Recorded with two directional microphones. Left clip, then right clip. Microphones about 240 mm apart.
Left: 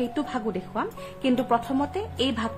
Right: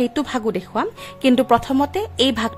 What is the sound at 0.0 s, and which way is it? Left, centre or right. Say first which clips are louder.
Speech: right 7 dB; right.